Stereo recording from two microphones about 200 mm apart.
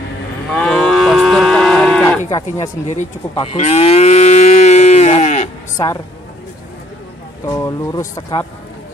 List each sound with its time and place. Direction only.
0.5 s moo: centre (ahead or behind)
2.9 s moo: 35° left (ahead or behind)
7.4 s speech: 15° left (ahead or behind)